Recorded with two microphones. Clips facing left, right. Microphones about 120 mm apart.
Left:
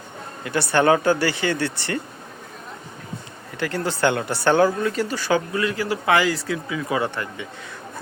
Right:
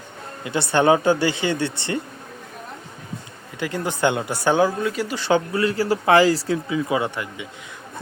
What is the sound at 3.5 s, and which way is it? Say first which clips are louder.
Speech: left 1 dB; 15° right (ahead or behind).